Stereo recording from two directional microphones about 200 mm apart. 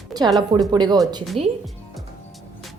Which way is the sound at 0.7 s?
20° right (ahead or behind).